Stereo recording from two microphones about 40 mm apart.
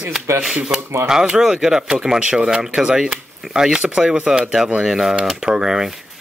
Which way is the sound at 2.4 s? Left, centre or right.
Centre.